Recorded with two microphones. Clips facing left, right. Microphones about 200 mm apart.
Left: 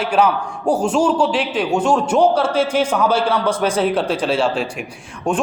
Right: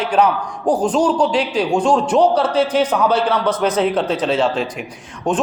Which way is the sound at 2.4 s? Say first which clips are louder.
Right 1 dB; 25° left (ahead or behind).